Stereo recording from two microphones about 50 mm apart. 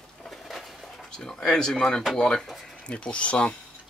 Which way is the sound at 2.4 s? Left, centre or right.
Centre.